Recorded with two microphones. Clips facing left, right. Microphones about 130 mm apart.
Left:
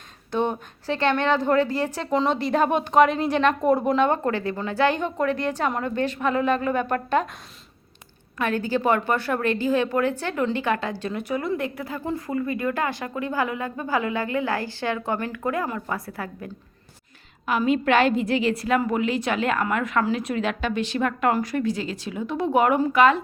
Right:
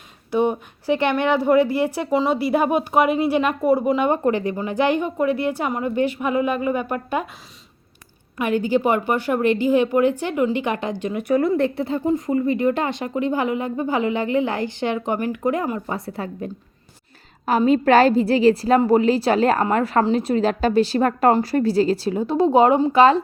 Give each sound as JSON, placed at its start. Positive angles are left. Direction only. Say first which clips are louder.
{"t": 0.3, "sound": "a woman's voice", "louder": "right 5 dB", "side_deg": -10}
{"t": 8.4, "sound": "a woman's voice", "louder": "right 4 dB", "side_deg": -15}
{"t": 11.5, "sound": "speech", "louder": "right 7 dB", "side_deg": -30}
{"t": 17.6, "sound": "a woman's voice", "louder": "right 5 dB", "side_deg": -35}